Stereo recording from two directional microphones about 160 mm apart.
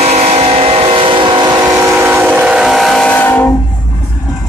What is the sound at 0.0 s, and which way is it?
Vehicle, 40° right (ahead or behind).